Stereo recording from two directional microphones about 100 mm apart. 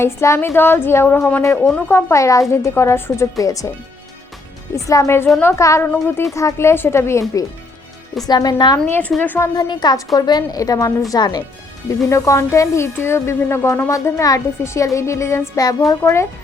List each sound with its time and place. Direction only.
0.0 s speech: 25° left (ahead or behind)
1.5 s a woman's voice: 10° left (ahead or behind)
1.9 s speech: 25° left (ahead or behind)
4.7 s a woman's voice: 30° left (ahead or behind)
8.3 s a woman's voice: 40° left (ahead or behind)
8.9 s a woman's voice: 15° left (ahead or behind)
9.6 s a woman's voice: 45° left (ahead or behind)